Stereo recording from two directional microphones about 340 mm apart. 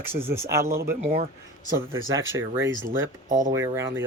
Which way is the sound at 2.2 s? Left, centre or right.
Centre.